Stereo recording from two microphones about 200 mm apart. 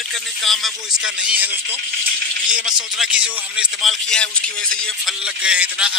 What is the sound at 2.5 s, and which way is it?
A man's voice, 5° right (ahead or behind).